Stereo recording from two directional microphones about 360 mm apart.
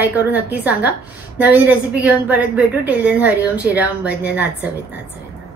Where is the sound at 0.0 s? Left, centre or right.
Centre.